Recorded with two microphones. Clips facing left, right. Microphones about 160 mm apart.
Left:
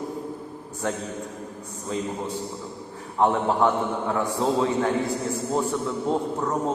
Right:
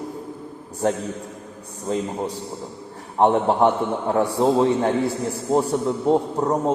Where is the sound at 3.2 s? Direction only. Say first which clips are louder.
Right 4 dB; 30° right (ahead or behind).